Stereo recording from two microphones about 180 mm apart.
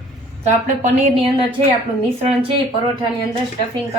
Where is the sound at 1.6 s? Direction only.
35° right (ahead or behind).